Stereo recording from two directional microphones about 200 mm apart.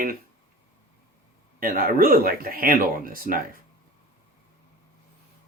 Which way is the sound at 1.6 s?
45° right (ahead or behind).